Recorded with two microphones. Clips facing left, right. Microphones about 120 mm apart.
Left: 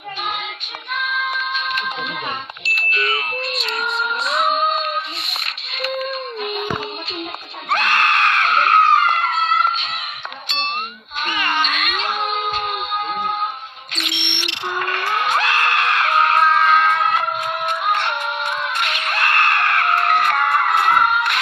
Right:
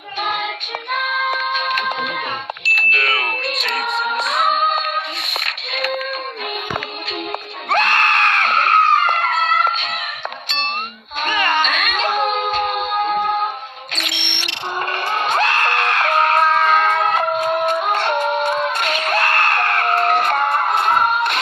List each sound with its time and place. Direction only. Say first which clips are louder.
0.9 s music: right 2 dB; 40° right (ahead or behind)
5.7 s a sound: right 2 dB; 45° right (ahead or behind)
7.7 s screaming: right 1 dB; 40° right (ahead or behind)
11.2 s music: right 3 dB; 40° right (ahead or behind)